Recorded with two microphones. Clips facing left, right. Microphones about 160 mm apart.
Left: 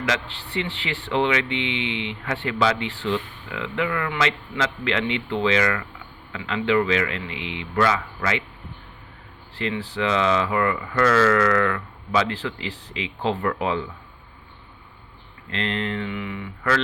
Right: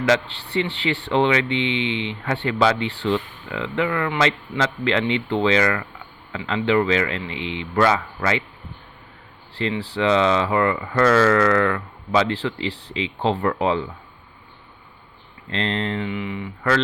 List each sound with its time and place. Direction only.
0.0 s speech: 35° right (ahead or behind)
9.6 s speech: 35° right (ahead or behind)
15.4 s speech: 35° right (ahead or behind)